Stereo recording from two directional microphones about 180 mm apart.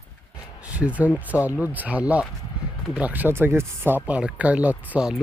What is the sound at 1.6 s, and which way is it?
Speech, 10° right (ahead or behind).